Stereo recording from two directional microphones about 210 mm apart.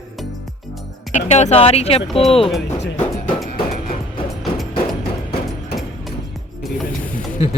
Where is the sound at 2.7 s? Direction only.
35° left (ahead or behind).